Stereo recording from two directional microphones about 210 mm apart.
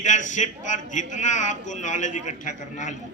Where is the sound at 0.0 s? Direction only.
35° left (ahead or behind).